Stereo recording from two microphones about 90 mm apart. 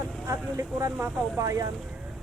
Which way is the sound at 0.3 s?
40° right (ahead or behind).